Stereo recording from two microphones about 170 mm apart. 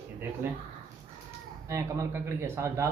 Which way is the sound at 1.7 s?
15° right (ahead or behind).